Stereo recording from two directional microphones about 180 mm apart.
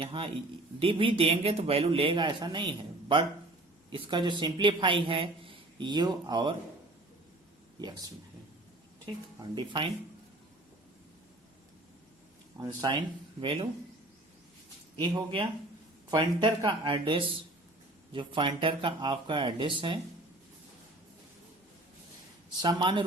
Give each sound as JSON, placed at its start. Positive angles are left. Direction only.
{"t": 0.0, "sound": "a man's voice", "side_deg": -30}
{"t": 9.4, "sound": "a man's voice", "side_deg": -25}
{"t": 12.5, "sound": "a man's voice", "side_deg": -20}
{"t": 14.9, "sound": "a man's voice", "side_deg": -25}
{"t": 22.6, "sound": "a man's voice", "side_deg": -25}